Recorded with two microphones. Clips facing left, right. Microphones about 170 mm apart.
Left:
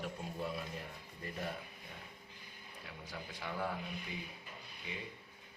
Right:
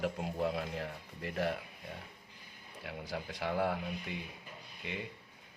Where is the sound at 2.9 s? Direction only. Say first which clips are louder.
Right 8 dB; 75° right (ahead or behind).